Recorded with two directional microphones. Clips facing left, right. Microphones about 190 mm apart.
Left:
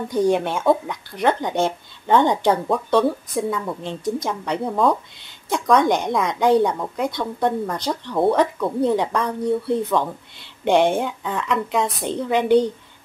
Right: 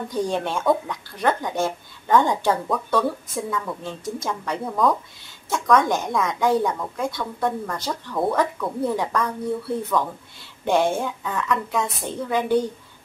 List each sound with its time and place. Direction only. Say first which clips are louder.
0.1 s a woman's voice: left 6 dB; 15° left (ahead or behind)